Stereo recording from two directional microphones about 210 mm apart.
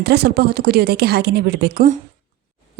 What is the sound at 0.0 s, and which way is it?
A woman's voice, 50° right (ahead or behind).